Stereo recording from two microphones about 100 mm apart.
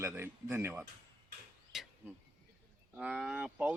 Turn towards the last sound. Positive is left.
turn(degrees=-10)  # may be behind; listen again after turning